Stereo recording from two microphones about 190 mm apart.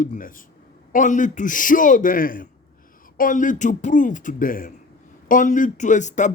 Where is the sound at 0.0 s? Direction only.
45° left (ahead or behind).